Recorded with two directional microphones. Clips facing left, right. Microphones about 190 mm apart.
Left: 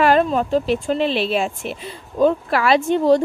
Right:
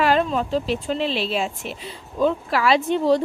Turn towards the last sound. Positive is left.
turn(degrees=50)  # may be behind; listen again after turning